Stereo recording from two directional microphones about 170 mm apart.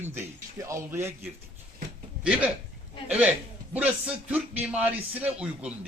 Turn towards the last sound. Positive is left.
turn(degrees=-5)  # may be behind; listen again after turning